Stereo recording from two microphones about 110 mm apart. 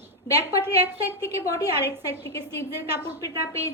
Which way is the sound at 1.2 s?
30° left (ahead or behind).